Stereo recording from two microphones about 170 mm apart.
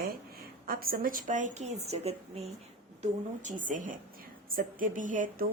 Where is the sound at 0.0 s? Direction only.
60° right (ahead or behind).